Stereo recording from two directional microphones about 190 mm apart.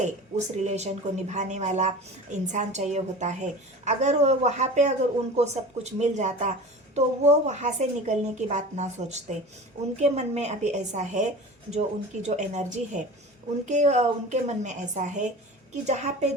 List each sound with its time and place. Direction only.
0.0 s a woman's voice: 40° right (ahead or behind)